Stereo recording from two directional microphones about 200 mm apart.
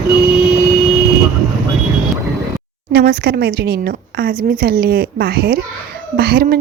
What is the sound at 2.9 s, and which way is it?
A woman's voice, 50° right (ahead or behind).